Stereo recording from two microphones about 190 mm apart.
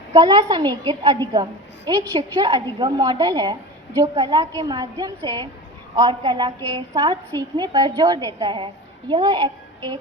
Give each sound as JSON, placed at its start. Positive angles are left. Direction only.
{"t": 0.1, "sound": "a woman's voice", "side_deg": -20}